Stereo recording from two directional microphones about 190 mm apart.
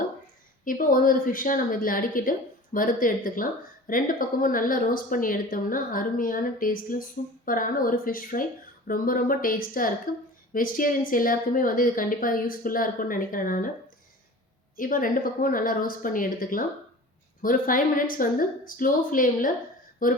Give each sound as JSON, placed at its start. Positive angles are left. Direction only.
{"t": 0.6, "sound": "a woman's voice", "side_deg": 45}
{"t": 14.8, "sound": "a woman's voice", "side_deg": 45}